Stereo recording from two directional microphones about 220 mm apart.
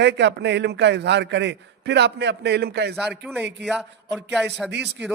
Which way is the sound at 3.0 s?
5° right (ahead or behind).